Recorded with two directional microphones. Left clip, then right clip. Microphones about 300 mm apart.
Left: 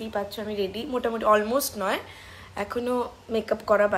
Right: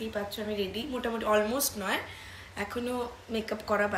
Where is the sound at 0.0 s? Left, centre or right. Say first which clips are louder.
Left 4 dB; centre.